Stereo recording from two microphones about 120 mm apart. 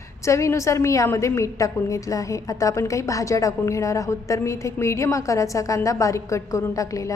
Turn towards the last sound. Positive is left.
turn(degrees=30)  # may be behind; listen again after turning